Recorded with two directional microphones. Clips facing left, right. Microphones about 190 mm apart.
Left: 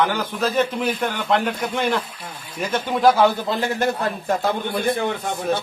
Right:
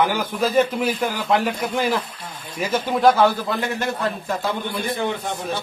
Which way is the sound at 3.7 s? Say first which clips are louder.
Left 2 dB; 45° left (ahead or behind).